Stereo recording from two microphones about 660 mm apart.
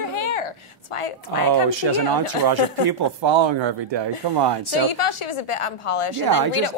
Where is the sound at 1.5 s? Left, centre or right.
Right.